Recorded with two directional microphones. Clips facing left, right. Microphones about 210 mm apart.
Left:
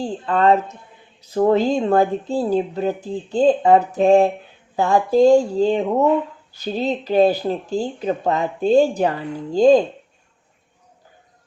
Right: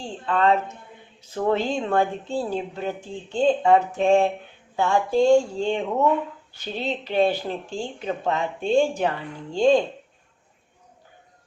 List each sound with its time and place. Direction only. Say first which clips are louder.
0.0 s speech: left 4 dB; 40° left (ahead or behind)